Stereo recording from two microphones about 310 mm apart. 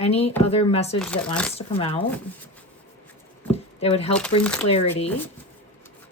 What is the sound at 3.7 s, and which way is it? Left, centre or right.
Speech, centre.